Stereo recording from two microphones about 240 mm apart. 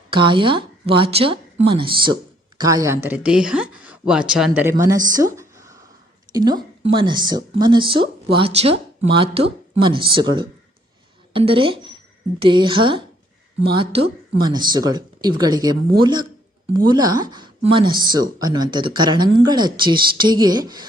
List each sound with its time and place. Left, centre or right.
0.1 s a woman's voice: centre
14.4 s speech: centre